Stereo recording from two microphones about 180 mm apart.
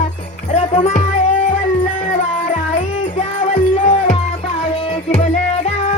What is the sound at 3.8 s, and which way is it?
Music, 45° left (ahead or behind).